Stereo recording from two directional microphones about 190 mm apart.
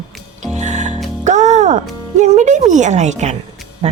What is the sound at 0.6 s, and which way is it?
Music, 40° right (ahead or behind).